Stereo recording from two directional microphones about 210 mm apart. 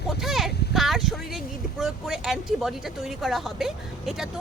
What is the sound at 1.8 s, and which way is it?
Speech, centre (ahead or behind).